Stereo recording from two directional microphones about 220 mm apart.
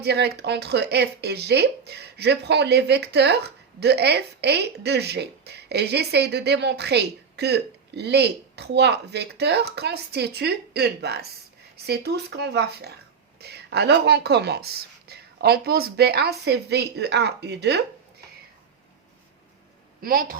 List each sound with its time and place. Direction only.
0.0 s speech: 50° right (ahead or behind)
20.0 s a woman's voice: 40° right (ahead or behind)